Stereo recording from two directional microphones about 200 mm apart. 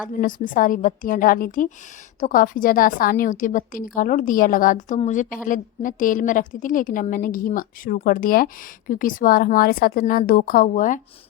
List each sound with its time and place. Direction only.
0.1 s a woman's voice: 40° left (ahead or behind)